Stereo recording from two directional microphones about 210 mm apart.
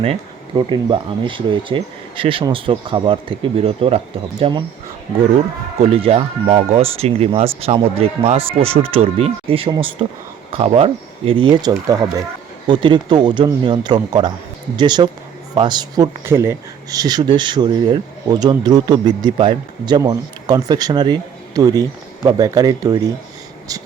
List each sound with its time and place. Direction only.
0.0 s speech: 25° right (ahead or behind)
5.8 s speech: 30° right (ahead or behind)